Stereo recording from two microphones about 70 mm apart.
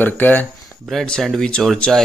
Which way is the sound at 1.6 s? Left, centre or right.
Centre.